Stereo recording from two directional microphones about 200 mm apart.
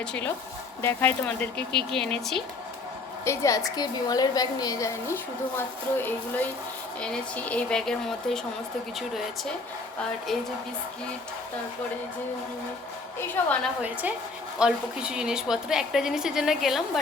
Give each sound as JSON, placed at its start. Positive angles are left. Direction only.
{"t": 0.0, "sound": "a woman's voice", "side_deg": 5}
{"t": 3.2, "sound": "a woman's voice", "side_deg": 15}
{"t": 13.1, "sound": "a woman's voice", "side_deg": 10}
{"t": 14.6, "sound": "a woman's voice", "side_deg": -5}